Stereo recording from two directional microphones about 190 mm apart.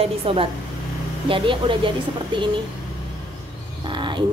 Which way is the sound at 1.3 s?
25° right (ahead or behind).